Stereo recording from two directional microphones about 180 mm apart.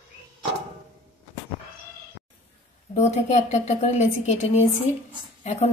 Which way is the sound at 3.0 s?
40° left (ahead or behind).